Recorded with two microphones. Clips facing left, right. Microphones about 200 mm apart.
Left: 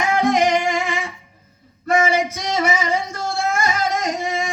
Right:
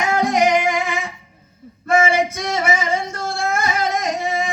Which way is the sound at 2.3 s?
55° right (ahead or behind).